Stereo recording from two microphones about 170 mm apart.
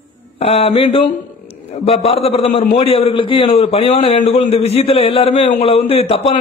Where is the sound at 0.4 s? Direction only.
35° left (ahead or behind).